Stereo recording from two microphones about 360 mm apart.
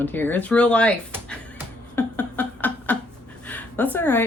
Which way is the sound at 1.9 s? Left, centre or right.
Centre.